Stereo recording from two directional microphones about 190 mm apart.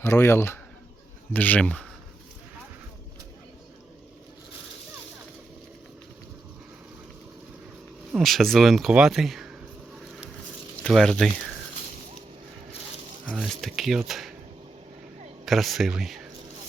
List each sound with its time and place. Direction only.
0.0 s speech: 15° left (ahead or behind)
8.1 s speech: centre (ahead or behind)
10.8 s speech: centre (ahead or behind)
13.2 s speech: 5° right (ahead or behind)
15.4 s speech: centre (ahead or behind)